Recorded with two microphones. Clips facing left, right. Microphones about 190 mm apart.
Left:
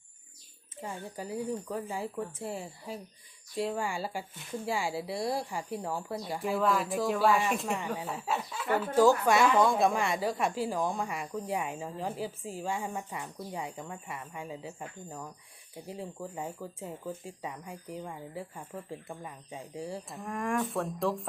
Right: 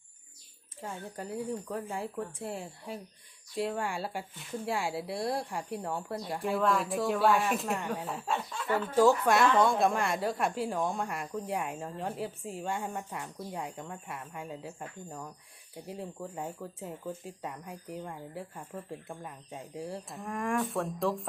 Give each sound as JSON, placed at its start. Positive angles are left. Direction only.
{"t": 0.8, "sound": "speech", "side_deg": 0}